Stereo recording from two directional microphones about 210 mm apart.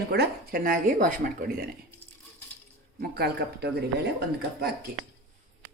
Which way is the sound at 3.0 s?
50° right (ahead or behind).